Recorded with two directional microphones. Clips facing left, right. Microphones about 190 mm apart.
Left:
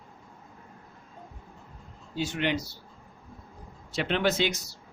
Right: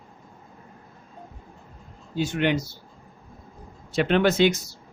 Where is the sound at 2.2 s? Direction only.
50° right (ahead or behind).